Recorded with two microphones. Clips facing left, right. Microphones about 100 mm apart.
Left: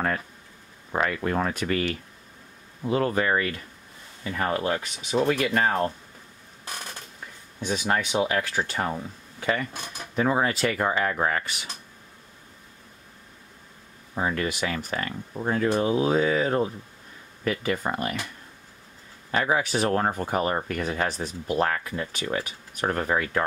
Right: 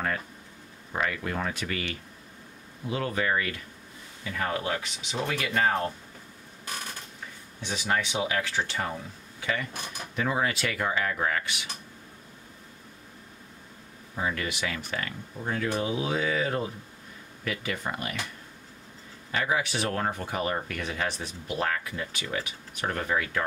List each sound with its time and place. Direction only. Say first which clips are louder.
0.9 s speech: left 5 dB; 45° left (ahead or behind)
7.6 s speech: left 3 dB; 40° left (ahead or behind)
14.1 s speech: left 4 dB; 40° left (ahead or behind)
19.3 s speech: left 4 dB; 40° left (ahead or behind)